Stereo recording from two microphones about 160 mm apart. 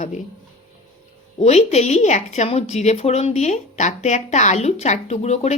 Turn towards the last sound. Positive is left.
turn(degrees=45)  # may be behind; listen again after turning